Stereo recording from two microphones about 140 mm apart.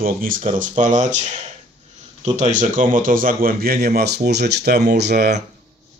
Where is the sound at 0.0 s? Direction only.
85° right.